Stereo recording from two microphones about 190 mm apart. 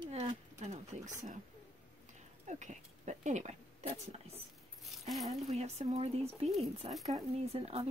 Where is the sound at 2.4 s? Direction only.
40° right (ahead or behind).